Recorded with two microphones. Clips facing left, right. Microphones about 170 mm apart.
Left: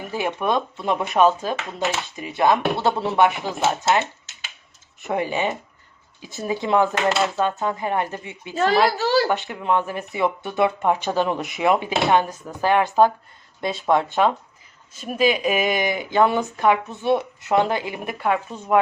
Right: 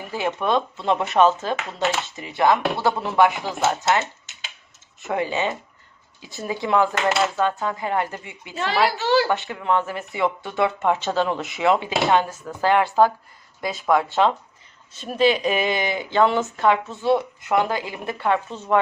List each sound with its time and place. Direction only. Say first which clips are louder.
0.1 s speech: right 1 dB; 15° left (ahead or behind)
2.4 s speech: even; 20° left (ahead or behind)
5.0 s speech: left 1 dB; 15° left (ahead or behind)
8.5 s a child's voice: left 3 dB; 40° left (ahead or behind)
9.5 s speech: even; 15° left (ahead or behind)
15.0 s speech: right 1 dB; 10° left (ahead or behind)
18.2 s speech: right 1 dB; 5° left (ahead or behind)